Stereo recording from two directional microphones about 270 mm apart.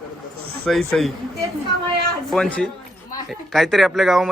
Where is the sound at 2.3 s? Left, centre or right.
Centre.